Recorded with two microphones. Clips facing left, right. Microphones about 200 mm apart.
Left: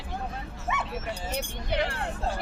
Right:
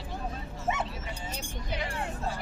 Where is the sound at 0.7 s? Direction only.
35° right (ahead or behind).